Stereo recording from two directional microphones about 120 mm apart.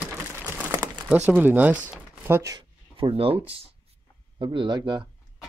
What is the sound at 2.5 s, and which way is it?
Speech, 45° right (ahead or behind).